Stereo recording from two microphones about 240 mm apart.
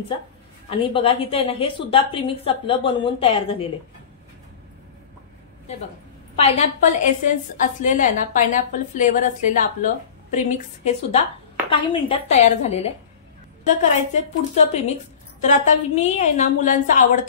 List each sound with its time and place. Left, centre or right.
0.7 s a woman's voice: left
6.3 s a woman's voice: left
14.1 s a woman's voice: left